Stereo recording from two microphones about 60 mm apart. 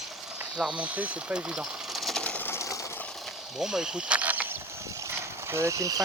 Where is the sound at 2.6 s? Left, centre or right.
Left.